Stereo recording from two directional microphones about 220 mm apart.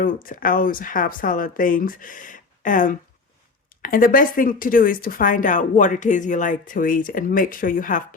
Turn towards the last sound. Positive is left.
turn(degrees=35)  # may be behind; listen again after turning